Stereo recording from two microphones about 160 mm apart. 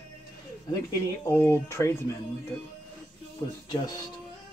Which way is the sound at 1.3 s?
15° left (ahead or behind).